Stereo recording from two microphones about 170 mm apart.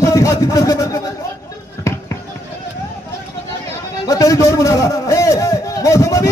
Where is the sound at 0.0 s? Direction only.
20° left (ahead or behind).